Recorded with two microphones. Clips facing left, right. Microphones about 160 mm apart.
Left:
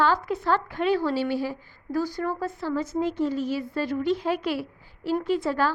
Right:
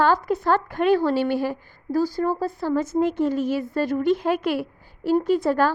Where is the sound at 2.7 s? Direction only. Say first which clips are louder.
Right 5 dB; 50° right (ahead or behind).